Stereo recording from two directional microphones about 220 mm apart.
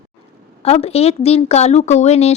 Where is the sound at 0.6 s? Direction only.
30° left (ahead or behind).